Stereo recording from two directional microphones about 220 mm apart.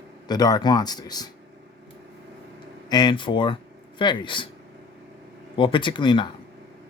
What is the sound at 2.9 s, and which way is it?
Speech, 20° left (ahead or behind).